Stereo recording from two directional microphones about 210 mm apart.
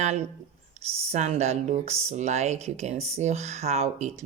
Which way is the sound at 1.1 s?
30° right (ahead or behind).